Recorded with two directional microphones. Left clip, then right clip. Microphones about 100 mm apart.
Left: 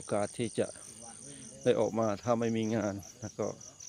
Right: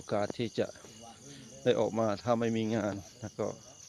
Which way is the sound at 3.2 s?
15° left (ahead or behind).